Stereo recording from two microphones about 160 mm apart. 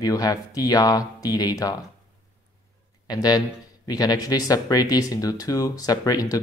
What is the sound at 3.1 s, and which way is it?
A man's voice, 25° left (ahead or behind).